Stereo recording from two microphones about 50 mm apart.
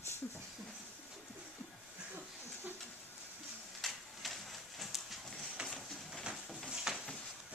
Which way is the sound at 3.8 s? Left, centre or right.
Centre.